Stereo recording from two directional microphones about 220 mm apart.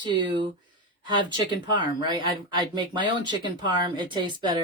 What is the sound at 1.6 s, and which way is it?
Speech, 20° right (ahead or behind).